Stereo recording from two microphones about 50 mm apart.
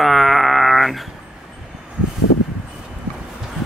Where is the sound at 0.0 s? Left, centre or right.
Centre.